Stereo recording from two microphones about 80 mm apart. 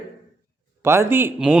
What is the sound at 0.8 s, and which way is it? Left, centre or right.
Speech, right.